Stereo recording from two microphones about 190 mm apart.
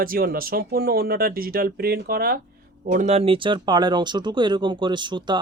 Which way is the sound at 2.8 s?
40° right (ahead or behind).